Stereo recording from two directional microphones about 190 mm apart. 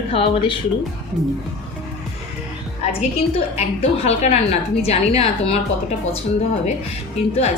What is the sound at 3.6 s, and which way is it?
A woman's voice, 35° left (ahead or behind).